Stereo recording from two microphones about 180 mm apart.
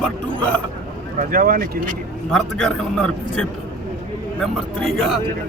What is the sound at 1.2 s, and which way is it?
Speech, 55° right (ahead or behind).